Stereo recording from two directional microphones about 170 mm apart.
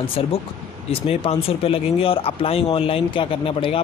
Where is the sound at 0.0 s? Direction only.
35° left (ahead or behind).